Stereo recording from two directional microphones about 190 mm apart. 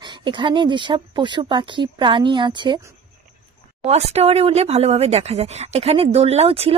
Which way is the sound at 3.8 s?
35° right (ahead or behind).